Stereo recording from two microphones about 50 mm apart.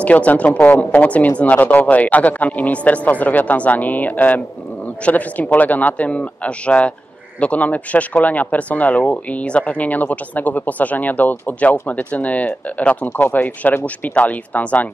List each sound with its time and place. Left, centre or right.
0.0 s a man's voice: left